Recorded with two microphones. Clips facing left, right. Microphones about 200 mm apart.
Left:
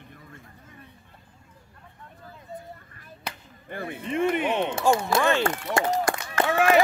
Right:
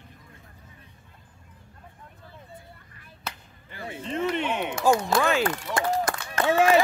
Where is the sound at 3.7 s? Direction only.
55° left (ahead or behind).